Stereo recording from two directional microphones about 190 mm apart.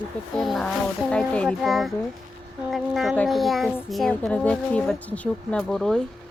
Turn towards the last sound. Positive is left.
turn(degrees=5)  # may be behind; listen again after turning